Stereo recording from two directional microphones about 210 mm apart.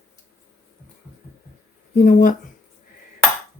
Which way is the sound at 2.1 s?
40° left (ahead or behind).